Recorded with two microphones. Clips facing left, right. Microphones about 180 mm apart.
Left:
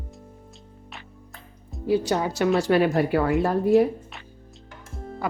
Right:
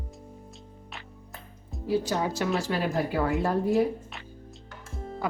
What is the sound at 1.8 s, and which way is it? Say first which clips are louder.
A woman's voice: left 4 dB; 70° left (ahead or behind).